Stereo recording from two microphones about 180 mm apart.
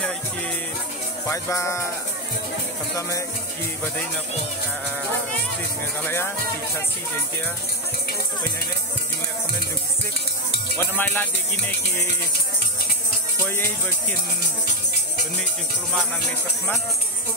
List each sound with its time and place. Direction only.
1.2 s music: 15° left (ahead or behind)
6.0 s music: 10° left (ahead or behind)
10.8 s music: 10° left (ahead or behind)